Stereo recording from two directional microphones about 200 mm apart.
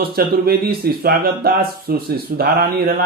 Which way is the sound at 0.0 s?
50° right (ahead or behind).